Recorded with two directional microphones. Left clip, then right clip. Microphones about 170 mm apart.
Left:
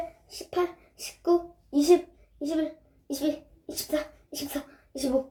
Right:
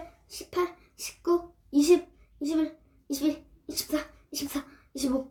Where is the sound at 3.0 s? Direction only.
15° right (ahead or behind).